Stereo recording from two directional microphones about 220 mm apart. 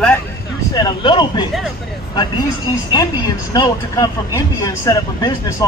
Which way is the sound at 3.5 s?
15° left (ahead or behind).